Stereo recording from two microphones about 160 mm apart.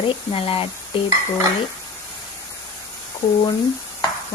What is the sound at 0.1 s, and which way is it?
Speech, 35° left (ahead or behind).